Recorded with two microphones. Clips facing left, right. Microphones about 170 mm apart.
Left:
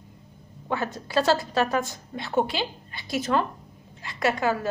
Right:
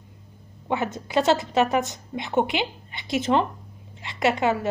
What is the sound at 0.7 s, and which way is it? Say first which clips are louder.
A woman's voice: right 2 dB; 20° right (ahead or behind).